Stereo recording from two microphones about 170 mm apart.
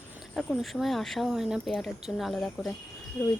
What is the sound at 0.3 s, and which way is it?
Speech, centre (ahead or behind).